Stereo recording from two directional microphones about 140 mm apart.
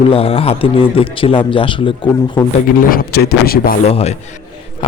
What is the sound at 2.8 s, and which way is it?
Speech, 90° left.